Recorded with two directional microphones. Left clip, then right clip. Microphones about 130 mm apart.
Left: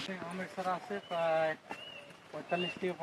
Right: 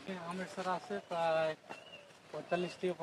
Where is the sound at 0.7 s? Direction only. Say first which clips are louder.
Left 1 dB; 30° right (ahead or behind).